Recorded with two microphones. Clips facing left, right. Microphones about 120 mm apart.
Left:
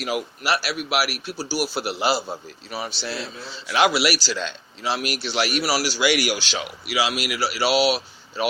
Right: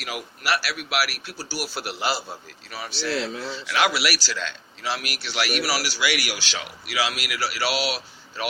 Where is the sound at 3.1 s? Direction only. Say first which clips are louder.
Right 4 dB; 85° right.